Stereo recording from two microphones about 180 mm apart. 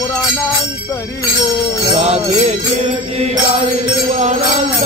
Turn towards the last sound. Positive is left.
turn(degrees=-35)  # may be behind; listen again after turning